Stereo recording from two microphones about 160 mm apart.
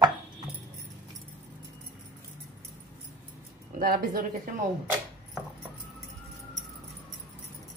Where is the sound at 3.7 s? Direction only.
70° right (ahead or behind).